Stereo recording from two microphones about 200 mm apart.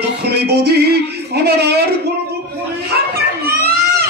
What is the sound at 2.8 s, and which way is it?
Children playing, 50° right (ahead or behind).